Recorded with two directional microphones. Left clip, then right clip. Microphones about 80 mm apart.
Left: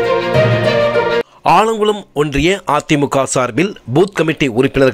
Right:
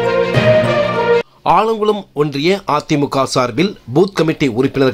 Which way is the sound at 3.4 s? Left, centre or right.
Left.